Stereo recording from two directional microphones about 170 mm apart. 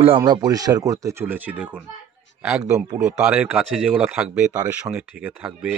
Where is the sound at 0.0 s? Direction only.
30° right (ahead or behind); by 1.9 s 10° right (ahead or behind).